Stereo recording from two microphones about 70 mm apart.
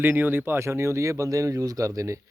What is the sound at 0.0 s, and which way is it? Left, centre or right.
Speech, right.